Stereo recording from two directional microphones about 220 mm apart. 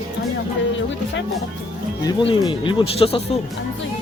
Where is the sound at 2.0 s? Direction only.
20° left (ahead or behind).